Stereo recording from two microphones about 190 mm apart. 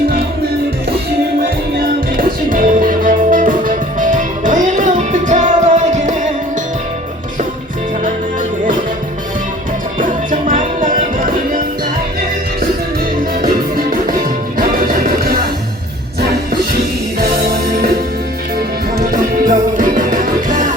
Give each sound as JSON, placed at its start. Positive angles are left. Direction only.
{"t": 1.8, "sound": "music", "side_deg": -50}
{"t": 10.0, "sound": "music", "side_deg": -45}
{"t": 13.4, "sound": "music", "side_deg": -50}
{"t": 17.2, "sound": "music", "side_deg": -50}